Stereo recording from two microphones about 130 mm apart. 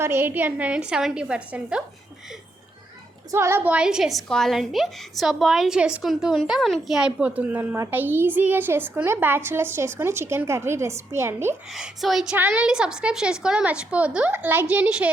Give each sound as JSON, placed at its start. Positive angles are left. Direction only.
{"t": 0.0, "sound": "a woman's voice", "side_deg": -20}
{"t": 3.3, "sound": "a woman's voice", "side_deg": -20}
{"t": 11.7, "sound": "a woman's voice", "side_deg": 0}